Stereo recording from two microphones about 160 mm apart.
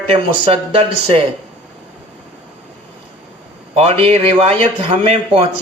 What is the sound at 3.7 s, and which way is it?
Speech, 40° right (ahead or behind).